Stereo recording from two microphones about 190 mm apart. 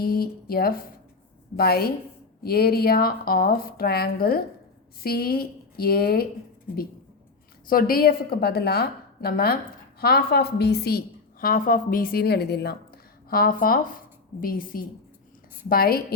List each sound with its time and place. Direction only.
0.0 s a woman's voice: 50° left (ahead or behind)
7.7 s a woman's voice: 50° left (ahead or behind)